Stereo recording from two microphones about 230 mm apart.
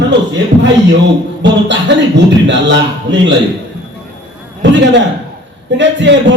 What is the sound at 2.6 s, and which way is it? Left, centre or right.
Speech, right.